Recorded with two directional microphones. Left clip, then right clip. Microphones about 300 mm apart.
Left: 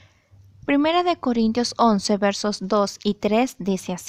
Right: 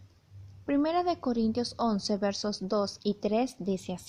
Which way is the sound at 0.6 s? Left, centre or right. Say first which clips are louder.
Left 8 dB; left.